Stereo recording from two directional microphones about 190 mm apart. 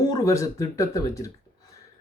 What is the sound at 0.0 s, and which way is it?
Speech, 15° left (ahead or behind).